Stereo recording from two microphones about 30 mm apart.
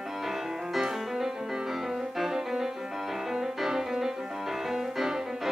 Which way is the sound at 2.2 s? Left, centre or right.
Centre.